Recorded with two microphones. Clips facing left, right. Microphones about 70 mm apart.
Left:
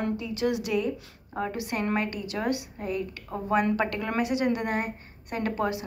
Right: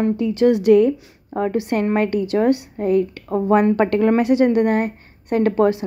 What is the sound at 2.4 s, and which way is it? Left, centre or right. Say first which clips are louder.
A woman's voice: right 11 dB; right.